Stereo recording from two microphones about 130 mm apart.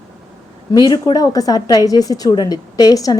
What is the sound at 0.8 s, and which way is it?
A woman's voice, 30° left (ahead or behind).